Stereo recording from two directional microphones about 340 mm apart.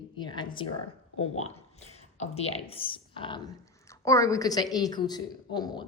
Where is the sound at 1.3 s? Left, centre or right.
Centre.